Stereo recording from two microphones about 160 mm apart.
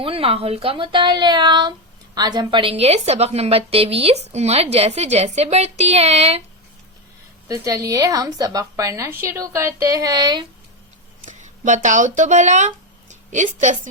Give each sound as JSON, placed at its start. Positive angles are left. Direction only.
{"t": 0.0, "sound": "a woman's voice", "side_deg": -35}
{"t": 7.4, "sound": "a woman's voice", "side_deg": -20}
{"t": 11.3, "sound": "a woman's voice", "side_deg": -50}